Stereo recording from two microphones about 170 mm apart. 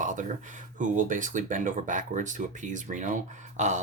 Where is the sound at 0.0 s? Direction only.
50° right (ahead or behind).